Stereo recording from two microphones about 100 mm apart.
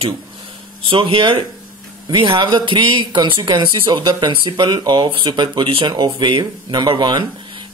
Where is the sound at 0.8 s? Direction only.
60° right (ahead or behind).